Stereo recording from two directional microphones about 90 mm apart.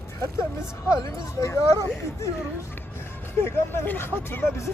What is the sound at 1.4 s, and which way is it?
Speech, 35° left (ahead or behind).